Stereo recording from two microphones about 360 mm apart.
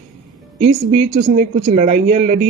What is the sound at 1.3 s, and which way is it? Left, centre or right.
A woman's voice, right.